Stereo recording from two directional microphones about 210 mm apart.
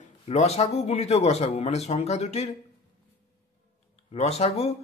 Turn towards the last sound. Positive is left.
turn(degrees=30)  # may be behind; listen again after turning